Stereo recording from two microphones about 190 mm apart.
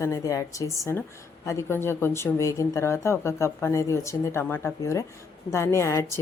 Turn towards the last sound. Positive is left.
turn(degrees=15)  # may be behind; listen again after turning